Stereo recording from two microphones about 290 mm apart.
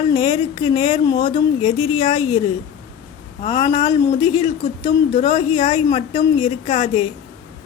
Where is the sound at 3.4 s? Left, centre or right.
Centre.